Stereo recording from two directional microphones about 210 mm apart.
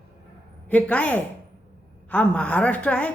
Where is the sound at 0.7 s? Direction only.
5° left (ahead or behind).